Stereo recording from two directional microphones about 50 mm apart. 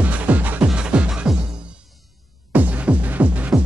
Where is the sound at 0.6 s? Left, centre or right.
Centre.